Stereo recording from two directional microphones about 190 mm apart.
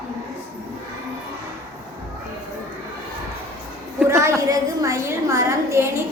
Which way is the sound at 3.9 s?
15° right (ahead or behind).